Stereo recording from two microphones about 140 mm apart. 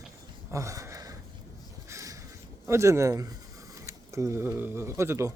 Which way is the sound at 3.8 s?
20° right (ahead or behind).